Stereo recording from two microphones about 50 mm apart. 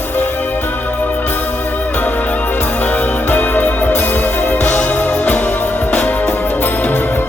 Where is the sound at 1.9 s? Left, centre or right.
Left.